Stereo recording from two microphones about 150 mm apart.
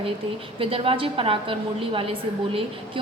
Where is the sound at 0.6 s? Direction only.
35° right (ahead or behind).